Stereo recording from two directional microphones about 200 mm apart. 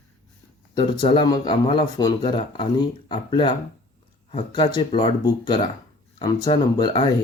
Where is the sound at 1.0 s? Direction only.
25° left (ahead or behind).